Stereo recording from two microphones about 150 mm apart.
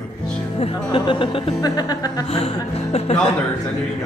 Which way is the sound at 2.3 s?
40° left (ahead or behind).